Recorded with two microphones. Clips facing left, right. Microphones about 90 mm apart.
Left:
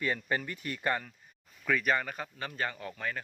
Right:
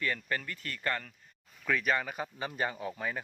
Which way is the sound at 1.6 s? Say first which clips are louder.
Left 1 dB; centre (ahead or behind).